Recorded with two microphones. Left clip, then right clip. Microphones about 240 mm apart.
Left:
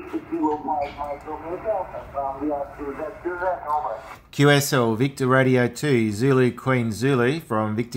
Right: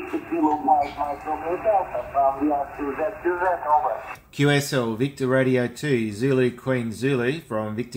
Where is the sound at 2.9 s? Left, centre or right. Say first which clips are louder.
Right 8 dB; right.